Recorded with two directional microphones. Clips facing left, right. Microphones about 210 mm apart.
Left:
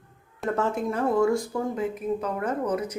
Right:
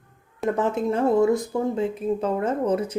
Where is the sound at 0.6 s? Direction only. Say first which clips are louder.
Right 3 dB; 20° right (ahead or behind).